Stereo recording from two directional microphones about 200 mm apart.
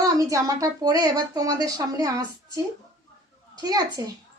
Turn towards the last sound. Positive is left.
turn(degrees=-20)  # may be behind; listen again after turning